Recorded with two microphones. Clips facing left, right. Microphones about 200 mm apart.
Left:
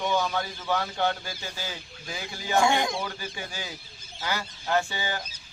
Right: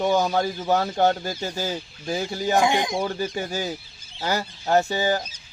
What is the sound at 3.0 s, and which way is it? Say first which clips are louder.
Speech: right 9 dB; 35° right (ahead or behind).